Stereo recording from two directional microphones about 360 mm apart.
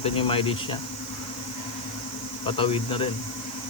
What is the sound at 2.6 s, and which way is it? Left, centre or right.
Speech, centre.